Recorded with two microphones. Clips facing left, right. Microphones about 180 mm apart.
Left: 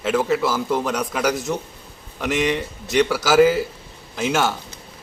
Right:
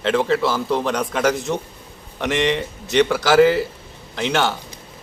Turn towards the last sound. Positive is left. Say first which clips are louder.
# even
turn(degrees=5)  # may be behind; listen again after turning